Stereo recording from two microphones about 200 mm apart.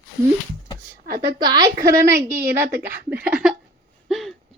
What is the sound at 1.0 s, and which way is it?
Speech, 50° right (ahead or behind).